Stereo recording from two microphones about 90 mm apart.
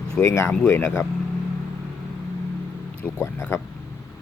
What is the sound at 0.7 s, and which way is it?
Speech, 20° left (ahead or behind).